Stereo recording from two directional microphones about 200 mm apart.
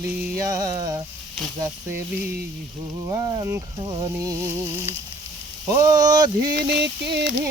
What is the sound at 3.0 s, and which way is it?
Speech, 20° right (ahead or behind).